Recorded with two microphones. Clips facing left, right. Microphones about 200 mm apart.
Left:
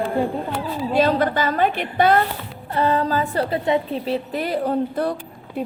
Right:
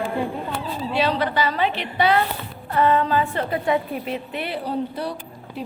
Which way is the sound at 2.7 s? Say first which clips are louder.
Right 1 dB; 30° left (ahead or behind).